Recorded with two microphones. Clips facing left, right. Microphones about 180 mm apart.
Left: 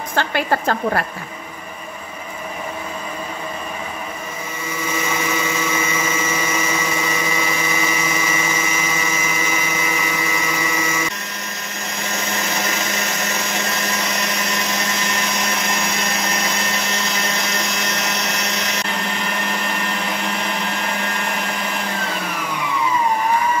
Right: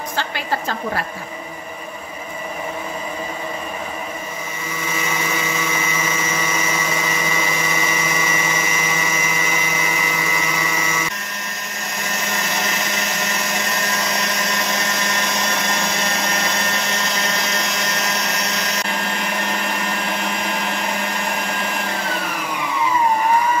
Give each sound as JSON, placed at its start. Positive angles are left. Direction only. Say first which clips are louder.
{"t": 0.1, "sound": "a woman's voice", "louder": "left 6 dB", "side_deg": 55}